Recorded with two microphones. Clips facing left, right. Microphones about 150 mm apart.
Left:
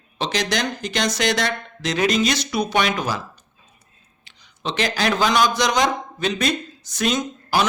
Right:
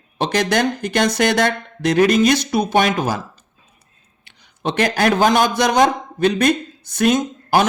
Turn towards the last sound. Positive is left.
turn(degrees=-55)  # may be behind; listen again after turning